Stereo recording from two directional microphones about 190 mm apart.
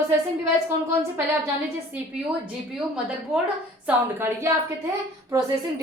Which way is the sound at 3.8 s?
10° right (ahead or behind).